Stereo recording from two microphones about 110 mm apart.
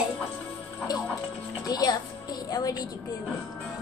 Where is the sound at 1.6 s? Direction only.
35° left (ahead or behind).